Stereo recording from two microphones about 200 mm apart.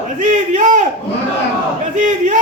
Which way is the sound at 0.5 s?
40° right (ahead or behind).